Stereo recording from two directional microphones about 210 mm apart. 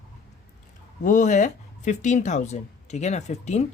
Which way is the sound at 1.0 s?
35° left (ahead or behind).